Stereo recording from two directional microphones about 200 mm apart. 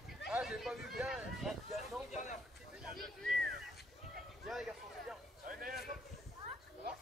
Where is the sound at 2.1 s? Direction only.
35° left (ahead or behind).